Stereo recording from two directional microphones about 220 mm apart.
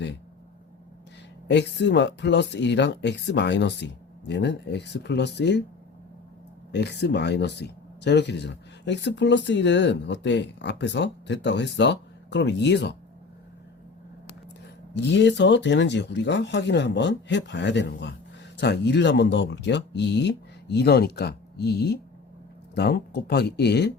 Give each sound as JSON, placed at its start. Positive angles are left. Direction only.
{"t": 1.5, "sound": "speech", "side_deg": 50}
{"t": 6.7, "sound": "speech", "side_deg": 50}
{"t": 14.9, "sound": "speech", "side_deg": 55}